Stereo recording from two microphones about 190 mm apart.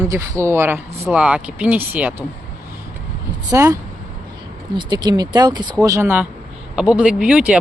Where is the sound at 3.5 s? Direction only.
15° right (ahead or behind).